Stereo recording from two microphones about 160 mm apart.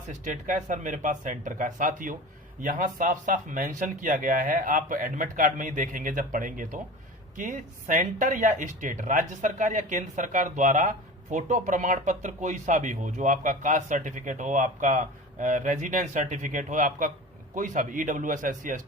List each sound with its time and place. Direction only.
0.1 s speech: 55° right (ahead or behind)